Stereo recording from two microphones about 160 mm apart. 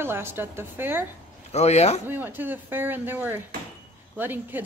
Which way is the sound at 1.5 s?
40° left (ahead or behind).